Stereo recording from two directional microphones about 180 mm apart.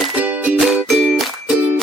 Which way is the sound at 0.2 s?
10° right (ahead or behind).